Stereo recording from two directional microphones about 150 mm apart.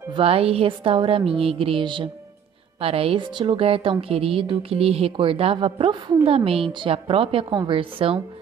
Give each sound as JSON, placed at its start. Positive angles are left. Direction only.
{"t": 0.1, "sound": "speech", "side_deg": -40}